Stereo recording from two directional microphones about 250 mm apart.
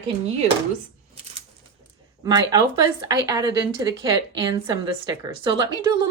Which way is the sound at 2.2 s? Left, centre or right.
Centre.